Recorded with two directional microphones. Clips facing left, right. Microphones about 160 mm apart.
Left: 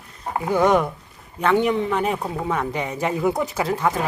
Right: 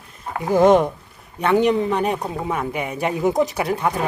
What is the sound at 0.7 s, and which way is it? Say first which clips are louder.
Speech: right 4 dB; 20° right (ahead or behind).